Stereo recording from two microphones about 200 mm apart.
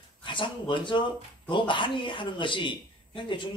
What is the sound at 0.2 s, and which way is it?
Speech, 25° left (ahead or behind).